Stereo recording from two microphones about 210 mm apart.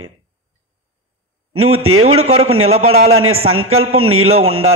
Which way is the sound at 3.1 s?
85° right.